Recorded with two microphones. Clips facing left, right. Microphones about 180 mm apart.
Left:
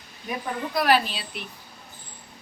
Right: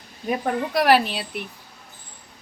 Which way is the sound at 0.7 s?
70° right (ahead or behind).